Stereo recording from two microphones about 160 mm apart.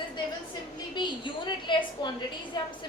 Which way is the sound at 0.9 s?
30° left (ahead or behind).